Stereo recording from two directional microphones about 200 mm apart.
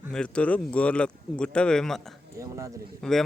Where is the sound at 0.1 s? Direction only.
5° left (ahead or behind).